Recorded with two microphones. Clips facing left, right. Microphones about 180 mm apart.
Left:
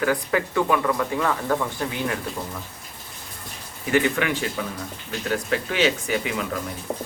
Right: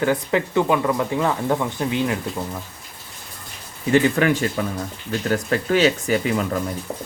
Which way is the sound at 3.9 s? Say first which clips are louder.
Right 5 dB; 40° right (ahead or behind).